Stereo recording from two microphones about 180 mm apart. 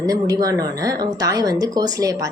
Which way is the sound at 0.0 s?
20° right (ahead or behind).